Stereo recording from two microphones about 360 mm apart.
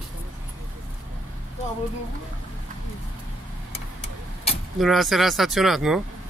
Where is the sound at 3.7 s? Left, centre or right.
Centre.